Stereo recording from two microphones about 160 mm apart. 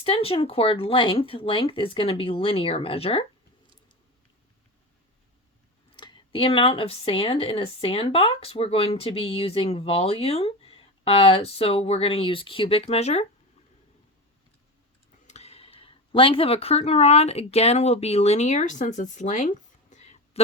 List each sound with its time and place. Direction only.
0.0 s speech: 35° left (ahead or behind)
6.0 s speech: 30° left (ahead or behind)
15.3 s speech: 40° left (ahead or behind)